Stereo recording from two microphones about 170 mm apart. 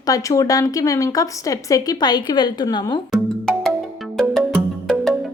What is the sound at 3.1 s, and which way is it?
Music, 5° right (ahead or behind).